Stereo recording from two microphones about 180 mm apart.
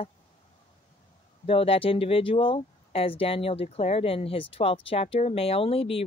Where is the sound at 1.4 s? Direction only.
30° left (ahead or behind).